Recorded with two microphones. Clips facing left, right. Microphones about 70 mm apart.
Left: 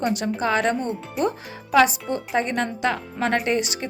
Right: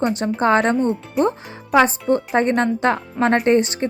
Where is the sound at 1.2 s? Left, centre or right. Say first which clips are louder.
Right 5 dB; centre.